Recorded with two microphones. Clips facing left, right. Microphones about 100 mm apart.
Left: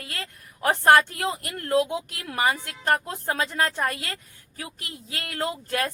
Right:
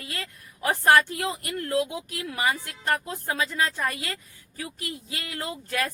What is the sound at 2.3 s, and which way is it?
Speech, 30° left (ahead or behind).